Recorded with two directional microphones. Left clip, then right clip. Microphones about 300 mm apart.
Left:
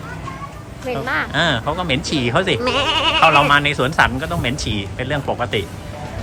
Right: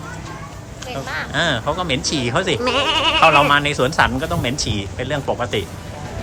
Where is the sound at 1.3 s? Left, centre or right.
Centre.